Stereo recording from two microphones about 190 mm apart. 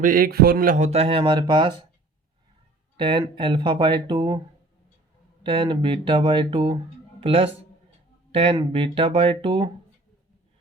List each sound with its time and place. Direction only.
0.0 s speech: 45° right (ahead or behind)
0.9 s speech: 30° right (ahead or behind)
3.0 s speech: 25° right (ahead or behind)
5.4 s speech: 25° right (ahead or behind)